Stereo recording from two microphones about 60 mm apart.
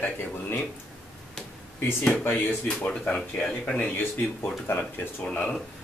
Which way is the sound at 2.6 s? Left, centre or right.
Centre.